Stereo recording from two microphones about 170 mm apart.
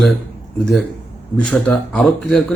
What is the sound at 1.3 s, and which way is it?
A man's voice, 5° left (ahead or behind).